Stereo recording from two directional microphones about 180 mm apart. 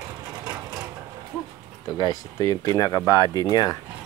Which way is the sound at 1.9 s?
20° left (ahead or behind).